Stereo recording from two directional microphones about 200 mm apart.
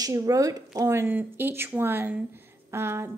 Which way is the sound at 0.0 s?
15° right (ahead or behind).